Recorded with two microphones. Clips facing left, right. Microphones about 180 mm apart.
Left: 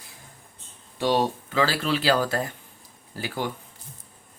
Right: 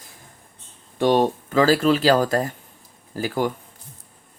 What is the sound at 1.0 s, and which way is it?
Speech, 50° right (ahead or behind).